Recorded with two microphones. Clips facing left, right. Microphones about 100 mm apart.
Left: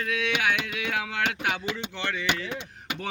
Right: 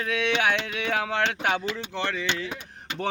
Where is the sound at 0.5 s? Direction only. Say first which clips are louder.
Right 2 dB; 35° right (ahead or behind).